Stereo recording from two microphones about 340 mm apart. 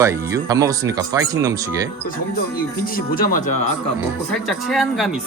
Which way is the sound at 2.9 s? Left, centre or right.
Left.